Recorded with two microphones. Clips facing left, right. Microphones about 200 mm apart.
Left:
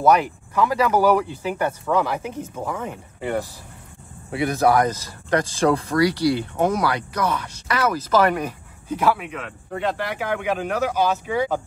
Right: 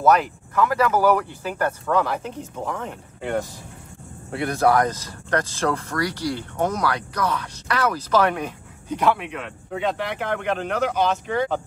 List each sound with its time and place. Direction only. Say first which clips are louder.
0.0 s speech: left 1 dB; 10° left (ahead or behind)